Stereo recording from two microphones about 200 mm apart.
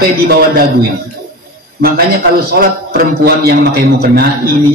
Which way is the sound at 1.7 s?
45° right (ahead or behind).